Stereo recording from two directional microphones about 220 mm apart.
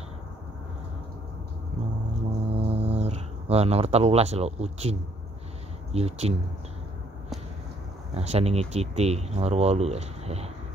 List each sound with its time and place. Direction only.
2.5 s a sound: 30° right (ahead or behind)
5.9 s speech: 30° right (ahead or behind)
8.1 s speech: 30° right (ahead or behind)